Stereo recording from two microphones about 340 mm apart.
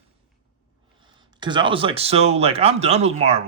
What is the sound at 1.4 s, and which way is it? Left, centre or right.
Speech, centre.